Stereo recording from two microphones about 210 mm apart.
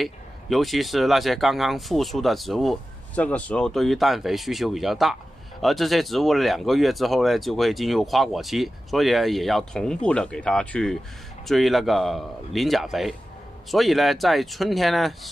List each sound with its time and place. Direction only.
0.0 s speech: centre (ahead or behind)